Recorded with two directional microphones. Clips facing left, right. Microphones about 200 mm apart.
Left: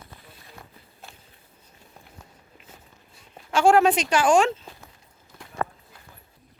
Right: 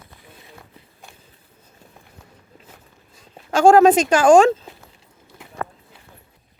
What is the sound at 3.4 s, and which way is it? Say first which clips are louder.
Speech: right 6 dB; 40° right (ahead or behind).